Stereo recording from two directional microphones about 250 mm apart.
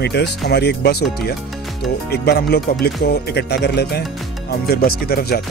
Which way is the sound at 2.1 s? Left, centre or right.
Left.